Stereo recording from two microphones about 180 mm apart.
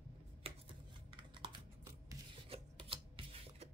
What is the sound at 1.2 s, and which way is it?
Computer keyboard, 25° right (ahead or behind).